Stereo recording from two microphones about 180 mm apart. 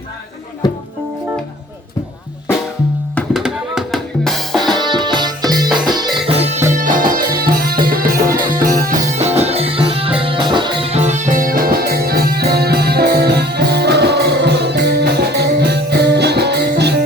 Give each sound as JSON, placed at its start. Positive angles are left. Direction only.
{"t": 3.2, "sound": "music", "side_deg": 0}
{"t": 4.7, "sound": "music", "side_deg": -25}
{"t": 6.2, "sound": "music", "side_deg": -35}
{"t": 6.7, "sound": "music", "side_deg": -45}
{"t": 8.6, "sound": "music", "side_deg": -45}